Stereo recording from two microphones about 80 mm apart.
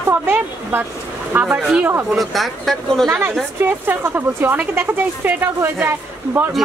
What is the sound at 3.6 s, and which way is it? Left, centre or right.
Speech, right.